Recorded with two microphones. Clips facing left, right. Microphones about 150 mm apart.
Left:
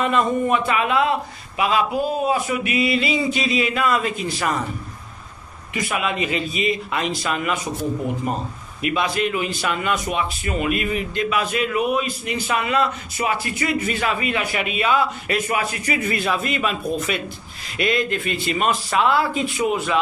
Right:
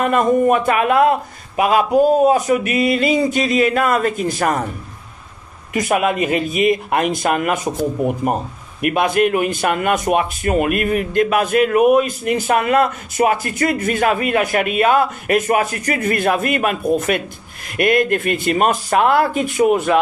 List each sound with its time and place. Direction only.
0.0 s a man's voice: 50° right (ahead or behind)
5.7 s a man's voice: 45° right (ahead or behind)
8.8 s a man's voice: 55° right (ahead or behind)